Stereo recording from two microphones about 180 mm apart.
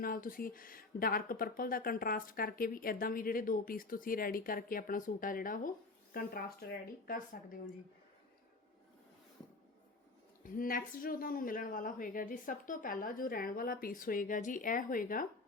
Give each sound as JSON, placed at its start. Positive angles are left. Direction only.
{"t": 0.0, "sound": "speech", "side_deg": 50}
{"t": 10.4, "sound": "speech", "side_deg": 50}